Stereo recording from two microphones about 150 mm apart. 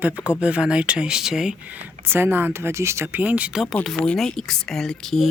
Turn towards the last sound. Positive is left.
turn(degrees=0)  # may be behind; listen again after turning